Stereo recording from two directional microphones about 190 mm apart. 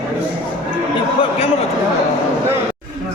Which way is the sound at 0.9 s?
30° left (ahead or behind).